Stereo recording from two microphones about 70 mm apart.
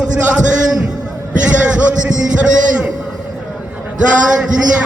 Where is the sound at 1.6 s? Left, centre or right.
Centre.